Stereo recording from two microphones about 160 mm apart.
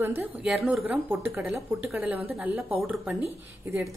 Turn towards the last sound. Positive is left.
turn(degrees=-15)  # may be behind; listen again after turning